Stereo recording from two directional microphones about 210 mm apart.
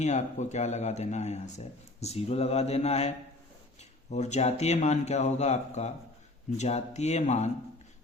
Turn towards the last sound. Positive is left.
turn(degrees=30)  # may be behind; listen again after turning